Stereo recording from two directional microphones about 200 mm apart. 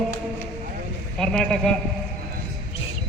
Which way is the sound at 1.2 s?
5° left (ahead or behind).